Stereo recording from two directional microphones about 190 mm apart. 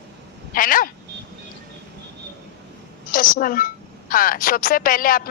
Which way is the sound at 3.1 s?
50° left (ahead or behind).